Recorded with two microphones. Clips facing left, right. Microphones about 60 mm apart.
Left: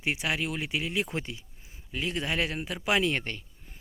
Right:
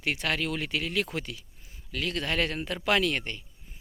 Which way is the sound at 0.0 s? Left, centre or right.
Centre.